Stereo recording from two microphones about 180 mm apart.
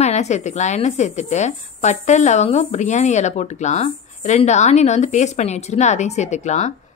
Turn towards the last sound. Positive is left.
turn(degrees=40)  # may be behind; listen again after turning